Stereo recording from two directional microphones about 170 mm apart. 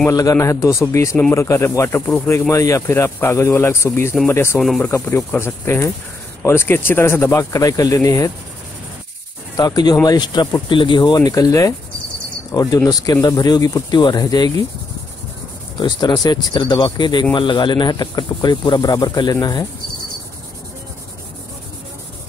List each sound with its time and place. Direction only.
0.0 s speech: 20° left (ahead or behind)
4.6 s speech: centre (ahead or behind)
4.8 s speech: 15° left (ahead or behind)
9.6 s speech: 25° left (ahead or behind)
15.8 s speech: 25° left (ahead or behind)